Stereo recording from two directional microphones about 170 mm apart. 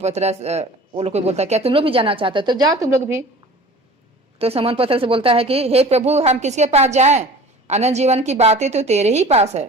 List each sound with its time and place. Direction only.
0.0 s speech: 40° right (ahead or behind); by 3.2 s 15° right (ahead or behind)
4.4 s speech: 35° right (ahead or behind)